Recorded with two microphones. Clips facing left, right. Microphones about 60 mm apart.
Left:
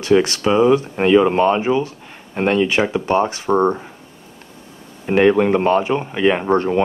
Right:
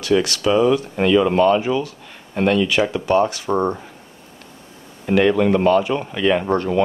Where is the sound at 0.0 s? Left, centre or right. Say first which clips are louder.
Left 3 dB; left.